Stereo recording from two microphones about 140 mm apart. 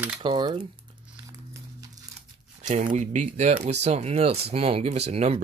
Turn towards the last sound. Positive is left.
turn(degrees=-50)  # may be behind; listen again after turning